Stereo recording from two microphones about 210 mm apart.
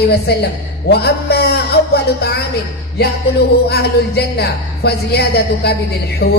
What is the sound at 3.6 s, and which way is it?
Speech, 50° left (ahead or behind).